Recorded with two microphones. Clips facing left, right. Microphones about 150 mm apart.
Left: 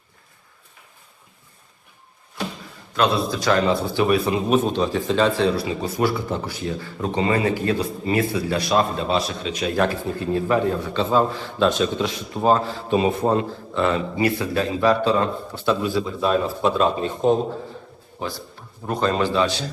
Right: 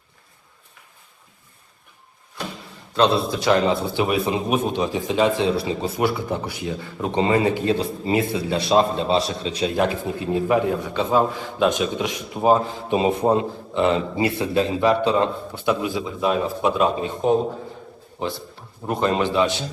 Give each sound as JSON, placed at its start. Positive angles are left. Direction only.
{"t": 2.9, "sound": "a man's voice", "side_deg": -25}
{"t": 9.6, "sound": "a man's voice", "side_deg": -20}
{"t": 18.2, "sound": "a man's voice", "side_deg": -25}